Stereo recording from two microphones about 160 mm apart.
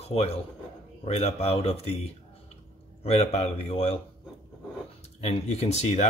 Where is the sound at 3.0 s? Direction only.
40° left (ahead or behind).